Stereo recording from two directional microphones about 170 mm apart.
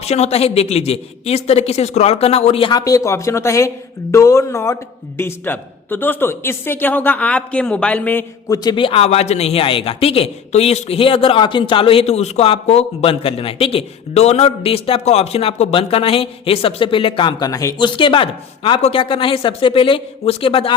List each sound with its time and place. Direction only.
0.0 s a man's voice: 40° left (ahead or behind)